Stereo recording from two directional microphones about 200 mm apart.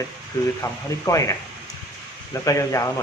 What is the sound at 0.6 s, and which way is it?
Speech, 15° left (ahead or behind).